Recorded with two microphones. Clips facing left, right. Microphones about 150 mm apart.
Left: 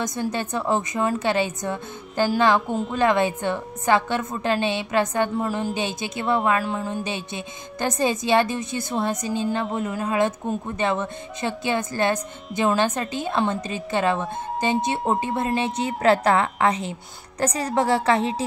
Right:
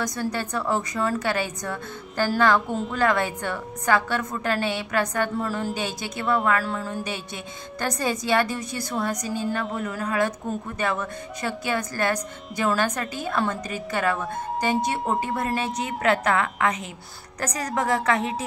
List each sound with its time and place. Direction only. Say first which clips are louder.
0.0 s speech: left 1 dB; 20° left (ahead or behind)